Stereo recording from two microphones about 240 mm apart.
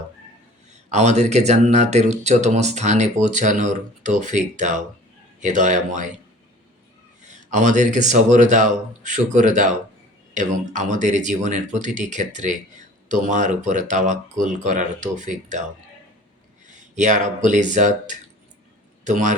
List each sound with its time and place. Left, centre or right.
0.7 s speech: right
7.2 s speech: right
16.6 s speech: right